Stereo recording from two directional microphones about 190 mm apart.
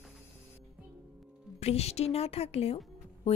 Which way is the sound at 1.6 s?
35° left (ahead or behind).